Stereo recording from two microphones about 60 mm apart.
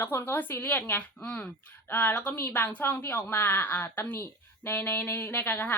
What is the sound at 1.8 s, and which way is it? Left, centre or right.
A woman's voice, left.